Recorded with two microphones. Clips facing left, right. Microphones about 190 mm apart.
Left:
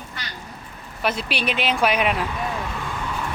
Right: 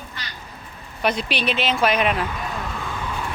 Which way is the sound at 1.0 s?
5° left (ahead or behind).